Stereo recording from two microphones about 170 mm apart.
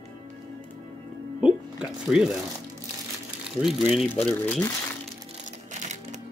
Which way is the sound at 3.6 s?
Centre (ahead or behind).